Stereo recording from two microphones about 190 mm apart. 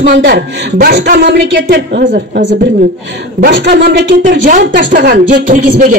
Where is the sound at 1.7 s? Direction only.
60° right (ahead or behind).